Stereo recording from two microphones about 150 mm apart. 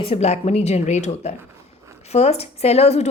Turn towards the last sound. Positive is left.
turn(degrees=45)  # may be behind; listen again after turning